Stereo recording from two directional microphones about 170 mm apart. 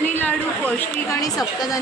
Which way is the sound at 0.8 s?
20° left (ahead or behind).